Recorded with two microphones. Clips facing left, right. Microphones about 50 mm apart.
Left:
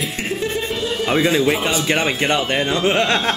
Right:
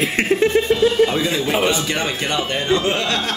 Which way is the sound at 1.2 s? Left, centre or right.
Left.